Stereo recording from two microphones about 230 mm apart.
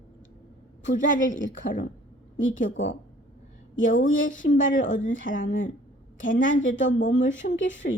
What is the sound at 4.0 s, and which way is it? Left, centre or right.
Speech, left.